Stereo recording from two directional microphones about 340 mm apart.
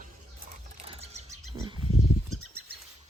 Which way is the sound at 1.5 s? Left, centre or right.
Centre.